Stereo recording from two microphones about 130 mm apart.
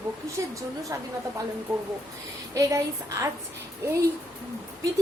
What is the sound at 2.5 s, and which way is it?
A woman's voice, 25° right (ahead or behind).